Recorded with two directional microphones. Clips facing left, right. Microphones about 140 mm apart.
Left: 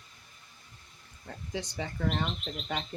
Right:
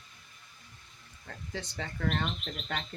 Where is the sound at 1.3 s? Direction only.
15° left (ahead or behind).